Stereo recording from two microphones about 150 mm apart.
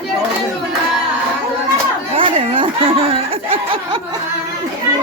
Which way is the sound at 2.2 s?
35° right (ahead or behind).